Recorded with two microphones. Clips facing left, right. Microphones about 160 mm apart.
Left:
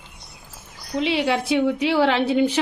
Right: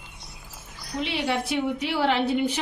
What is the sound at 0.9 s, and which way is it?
A woman's voice, 90° left.